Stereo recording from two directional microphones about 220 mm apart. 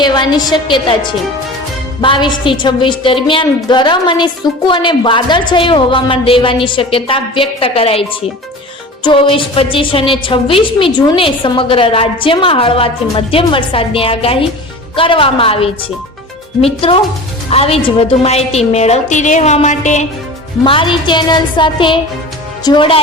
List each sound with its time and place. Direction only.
0.0 s a woman's voice: 20° left (ahead or behind)
2.0 s a woman's voice: 20° left (ahead or behind)
9.0 s a woman's voice: 25° left (ahead or behind)